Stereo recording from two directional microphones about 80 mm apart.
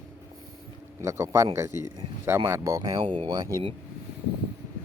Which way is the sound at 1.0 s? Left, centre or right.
Right.